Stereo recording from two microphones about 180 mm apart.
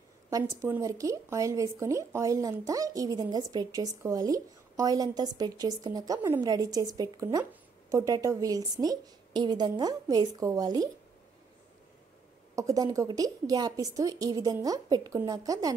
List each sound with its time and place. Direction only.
0.3 s speech: 15° right (ahead or behind)
12.5 s speech: 20° right (ahead or behind)